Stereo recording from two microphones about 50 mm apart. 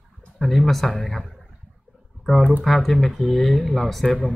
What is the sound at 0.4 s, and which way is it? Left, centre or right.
Speech, centre.